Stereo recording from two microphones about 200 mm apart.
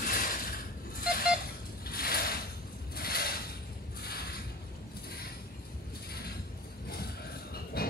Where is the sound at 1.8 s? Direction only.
50° left (ahead or behind).